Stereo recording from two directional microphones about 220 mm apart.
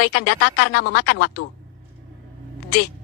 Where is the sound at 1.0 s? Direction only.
90° left.